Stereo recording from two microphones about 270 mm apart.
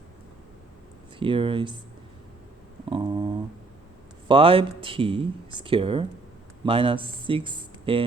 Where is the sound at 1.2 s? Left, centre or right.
Centre.